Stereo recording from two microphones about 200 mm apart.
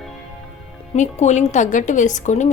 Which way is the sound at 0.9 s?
35° left (ahead or behind).